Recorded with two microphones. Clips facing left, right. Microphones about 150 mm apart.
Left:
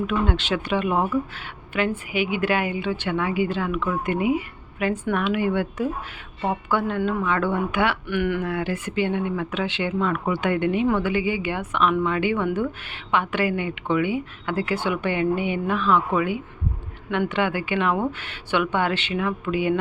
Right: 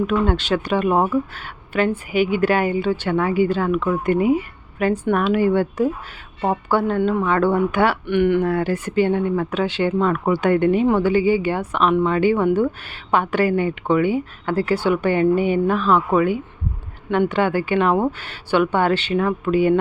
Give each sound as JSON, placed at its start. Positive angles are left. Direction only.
{"t": 0.1, "sound": "a woman's voice", "side_deg": -40}
{"t": 8.0, "sound": "speech", "side_deg": -25}
{"t": 8.4, "sound": "a woman's voice", "side_deg": -40}